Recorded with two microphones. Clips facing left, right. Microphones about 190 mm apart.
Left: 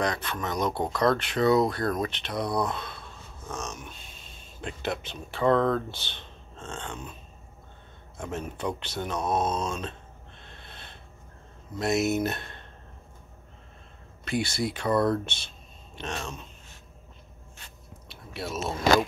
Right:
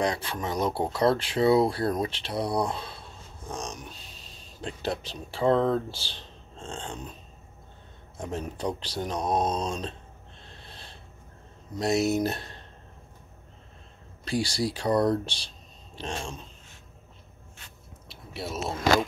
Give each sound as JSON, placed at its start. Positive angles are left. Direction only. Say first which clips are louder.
{"t": 0.0, "sound": "speech", "louder": "right 1 dB", "side_deg": -30}
{"t": 8.2, "sound": "speech", "louder": "right 1 dB", "side_deg": -35}
{"t": 10.4, "sound": "snort", "louder": "even", "side_deg": -35}
{"t": 11.8, "sound": "speech", "louder": "right 1 dB", "side_deg": -35}
{"t": 14.2, "sound": "speech", "louder": "right 1 dB", "side_deg": -35}
{"t": 18.5, "sound": "speech", "louder": "left 1 dB", "side_deg": 0}